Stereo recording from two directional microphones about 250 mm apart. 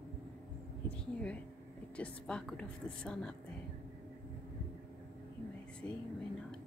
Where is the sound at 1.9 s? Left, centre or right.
Centre.